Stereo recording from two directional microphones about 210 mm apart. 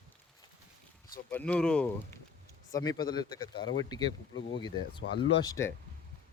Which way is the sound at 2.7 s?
20° left (ahead or behind).